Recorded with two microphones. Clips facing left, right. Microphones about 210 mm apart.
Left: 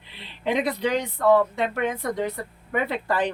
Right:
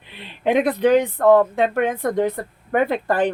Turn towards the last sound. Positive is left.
turn(degrees=-50)  # may be behind; listen again after turning